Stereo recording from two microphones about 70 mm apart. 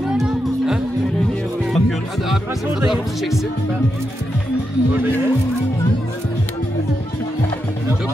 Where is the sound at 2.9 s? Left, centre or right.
Centre.